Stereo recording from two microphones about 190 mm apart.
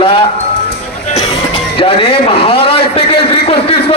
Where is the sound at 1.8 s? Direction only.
30° left (ahead or behind).